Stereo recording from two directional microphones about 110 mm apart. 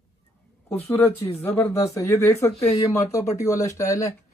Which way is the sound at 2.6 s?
75° left (ahead or behind).